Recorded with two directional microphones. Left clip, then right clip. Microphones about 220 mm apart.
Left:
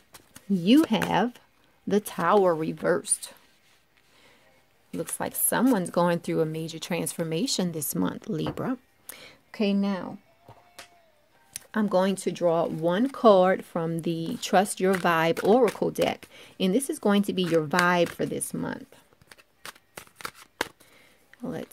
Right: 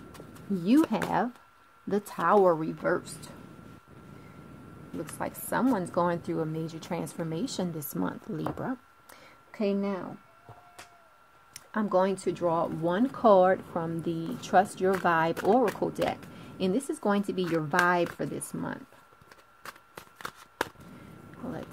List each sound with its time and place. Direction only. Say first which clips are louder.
0.5 s a woman's voice: left 4 dB; 30° left (ahead or behind)
4.9 s a woman's voice: left 4 dB; 40° left (ahead or behind)
11.7 s a woman's voice: left 2 dB; 40° left (ahead or behind)
19.6 s shuffling cards: left 2 dB; 20° left (ahead or behind)
21.4 s a woman's voice: left 4 dB; 40° left (ahead or behind)